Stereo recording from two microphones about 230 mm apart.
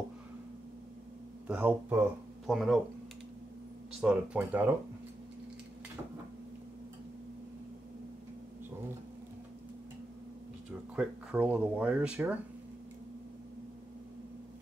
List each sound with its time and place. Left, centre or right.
1.5 s speech: centre
4.0 s speech: centre
11.0 s speech: centre